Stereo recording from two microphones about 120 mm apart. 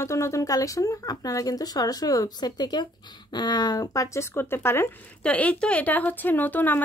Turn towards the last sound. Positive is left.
turn(degrees=15)  # may be behind; listen again after turning